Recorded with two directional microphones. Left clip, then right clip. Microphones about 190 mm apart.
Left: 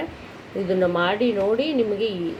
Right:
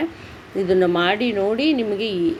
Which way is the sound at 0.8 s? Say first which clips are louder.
Right 2 dB; 40° right (ahead or behind).